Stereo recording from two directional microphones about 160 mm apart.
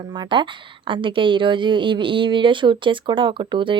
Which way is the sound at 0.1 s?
30° right (ahead or behind).